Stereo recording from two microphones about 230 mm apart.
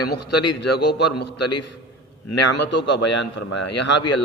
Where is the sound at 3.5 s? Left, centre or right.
Left.